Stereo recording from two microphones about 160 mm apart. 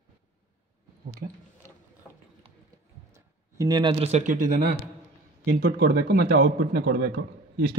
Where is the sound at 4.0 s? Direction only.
50° right (ahead or behind).